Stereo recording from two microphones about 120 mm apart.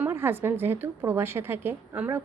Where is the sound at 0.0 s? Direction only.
20° right (ahead or behind).